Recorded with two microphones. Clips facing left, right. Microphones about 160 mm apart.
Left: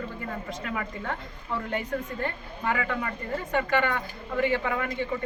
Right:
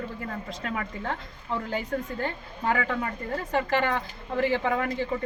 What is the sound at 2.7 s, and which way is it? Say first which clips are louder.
Speech: right 2 dB; 30° right (ahead or behind).